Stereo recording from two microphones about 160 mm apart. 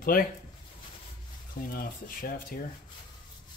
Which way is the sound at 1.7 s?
65° left (ahead or behind).